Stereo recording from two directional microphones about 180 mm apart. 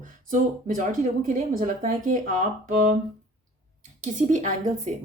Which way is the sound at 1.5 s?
45° right (ahead or behind).